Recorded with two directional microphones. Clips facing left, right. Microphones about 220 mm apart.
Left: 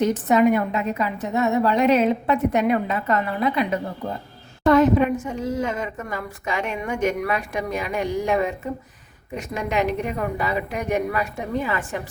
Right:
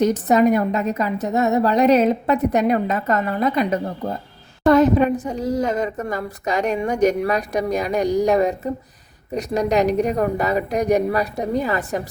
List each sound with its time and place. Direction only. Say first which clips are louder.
0.0 s a woman's voice: right 2 dB; 40° right (ahead or behind)